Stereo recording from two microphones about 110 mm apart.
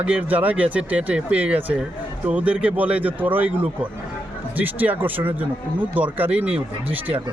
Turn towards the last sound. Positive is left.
turn(degrees=-15)  # may be behind; listen again after turning